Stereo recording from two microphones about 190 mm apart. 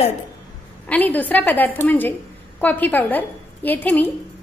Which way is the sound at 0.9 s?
10° left (ahead or behind).